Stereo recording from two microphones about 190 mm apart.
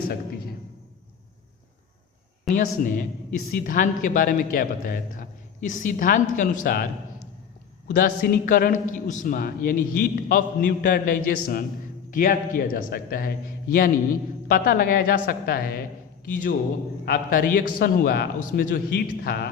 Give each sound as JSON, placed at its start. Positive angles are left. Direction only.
{"t": 2.7, "sound": "a man's voice", "side_deg": 45}
{"t": 7.9, "sound": "a man's voice", "side_deg": 50}
{"t": 17.1, "sound": "a man's voice", "side_deg": 50}